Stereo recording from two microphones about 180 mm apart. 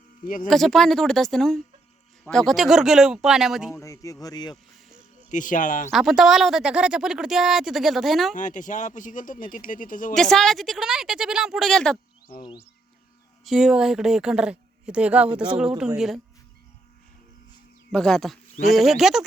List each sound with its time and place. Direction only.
0.4 s speech: centre (ahead or behind)
3.7 s speech: 15° left (ahead or behind)
5.3 s speech: 45° left (ahead or behind)
5.9 s speech: centre (ahead or behind)
8.4 s speech: 45° left (ahead or behind)
10.2 s speech: centre (ahead or behind)
12.3 s speech: 25° left (ahead or behind)
13.4 s speech: centre (ahead or behind)
17.9 s speech: 5° left (ahead or behind)